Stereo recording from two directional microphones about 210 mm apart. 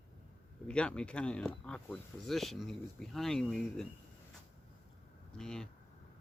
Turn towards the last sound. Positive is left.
turn(degrees=5)  # may be behind; listen again after turning